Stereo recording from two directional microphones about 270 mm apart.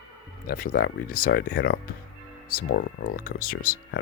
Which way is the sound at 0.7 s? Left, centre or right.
Left.